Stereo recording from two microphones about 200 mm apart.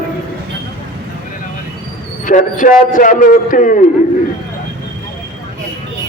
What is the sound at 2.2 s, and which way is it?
A man's voice, 40° left (ahead or behind).